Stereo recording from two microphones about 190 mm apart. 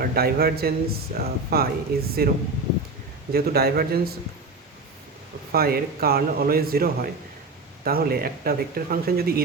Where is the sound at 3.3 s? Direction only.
55° right (ahead or behind).